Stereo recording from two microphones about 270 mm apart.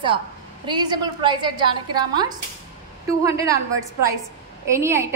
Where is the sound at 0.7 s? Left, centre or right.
Centre.